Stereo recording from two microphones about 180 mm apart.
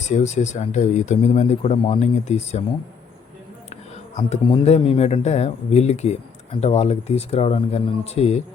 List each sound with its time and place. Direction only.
0.1 s speech: 40° left (ahead or behind)
4.4 s speech: 30° left (ahead or behind)